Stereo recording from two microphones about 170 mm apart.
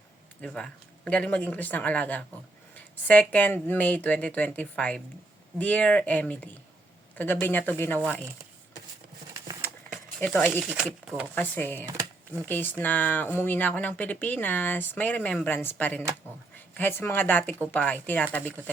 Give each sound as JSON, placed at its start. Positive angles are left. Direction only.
{"t": 0.4, "sound": "speech", "side_deg": 5}
{"t": 10.2, "sound": "speech", "side_deg": 5}
{"t": 10.7, "sound": "speech", "side_deg": -5}
{"t": 11.3, "sound": "speech", "side_deg": 10}
{"t": 11.9, "sound": "a sound", "side_deg": -15}
{"t": 12.5, "sound": "speech", "side_deg": 10}